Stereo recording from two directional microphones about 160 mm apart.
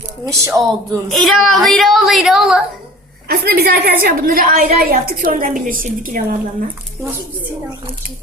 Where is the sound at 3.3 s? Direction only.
80° right.